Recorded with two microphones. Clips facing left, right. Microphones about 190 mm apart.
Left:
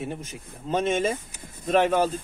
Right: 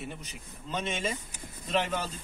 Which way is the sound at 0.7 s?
50° left (ahead or behind).